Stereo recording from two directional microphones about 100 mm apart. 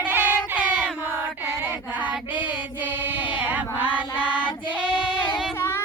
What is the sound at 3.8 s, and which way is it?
Chant, 10° right (ahead or behind).